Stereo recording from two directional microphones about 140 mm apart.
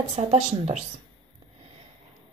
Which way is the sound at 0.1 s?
50° right (ahead or behind).